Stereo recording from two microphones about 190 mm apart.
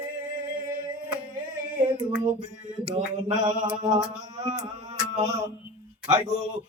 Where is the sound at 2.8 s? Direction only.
25° right (ahead or behind).